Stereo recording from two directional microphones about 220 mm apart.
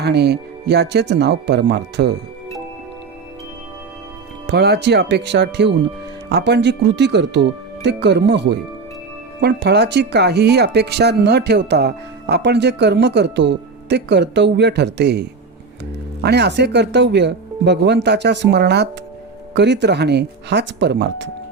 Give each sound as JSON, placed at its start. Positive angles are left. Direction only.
{"t": 0.0, "sound": "speech", "side_deg": -50}
{"t": 4.4, "sound": "speech", "side_deg": -50}